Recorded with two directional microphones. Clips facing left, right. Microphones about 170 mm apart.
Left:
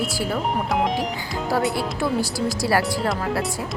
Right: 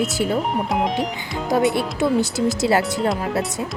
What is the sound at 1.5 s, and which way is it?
Speech, 20° right (ahead or behind).